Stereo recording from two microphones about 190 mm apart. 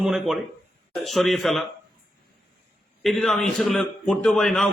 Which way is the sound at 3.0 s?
Centre (ahead or behind).